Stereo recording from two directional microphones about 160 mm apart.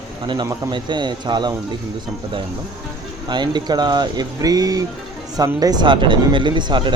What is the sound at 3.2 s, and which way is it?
Speech, 25° right (ahead or behind).